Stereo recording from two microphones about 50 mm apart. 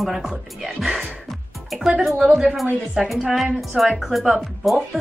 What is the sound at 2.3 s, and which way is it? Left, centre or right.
A woman's voice, centre.